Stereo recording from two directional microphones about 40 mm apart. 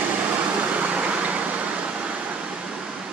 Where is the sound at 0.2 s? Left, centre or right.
Right.